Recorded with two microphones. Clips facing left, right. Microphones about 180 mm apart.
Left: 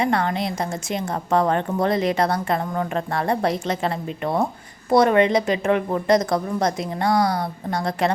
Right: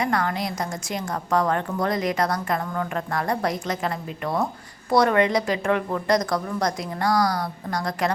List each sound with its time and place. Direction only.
0.0 s a woman's voice: 25° left (ahead or behind)